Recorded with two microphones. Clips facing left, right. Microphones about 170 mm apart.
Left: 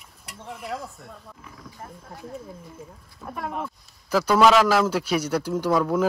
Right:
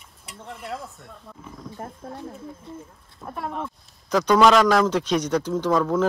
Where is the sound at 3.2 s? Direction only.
Centre (ahead or behind).